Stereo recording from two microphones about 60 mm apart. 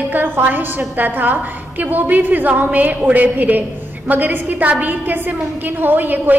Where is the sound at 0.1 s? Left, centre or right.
Right.